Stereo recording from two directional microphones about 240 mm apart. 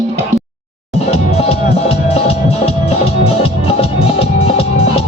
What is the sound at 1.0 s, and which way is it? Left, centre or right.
Music, left.